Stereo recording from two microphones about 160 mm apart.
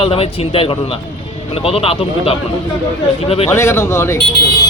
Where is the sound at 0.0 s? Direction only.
35° left (ahead or behind).